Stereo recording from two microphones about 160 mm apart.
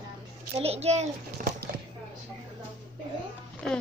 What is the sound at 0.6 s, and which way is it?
Speech, 40° right (ahead or behind).